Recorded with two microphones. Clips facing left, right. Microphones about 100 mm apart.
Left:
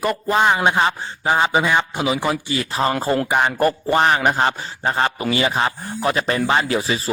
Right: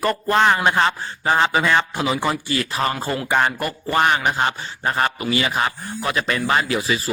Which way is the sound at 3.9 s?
30° left (ahead or behind).